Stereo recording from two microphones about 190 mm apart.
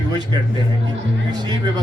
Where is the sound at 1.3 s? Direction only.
20° right (ahead or behind).